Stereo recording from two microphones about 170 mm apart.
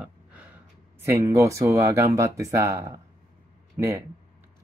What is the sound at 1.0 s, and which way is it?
Speech, 15° right (ahead or behind).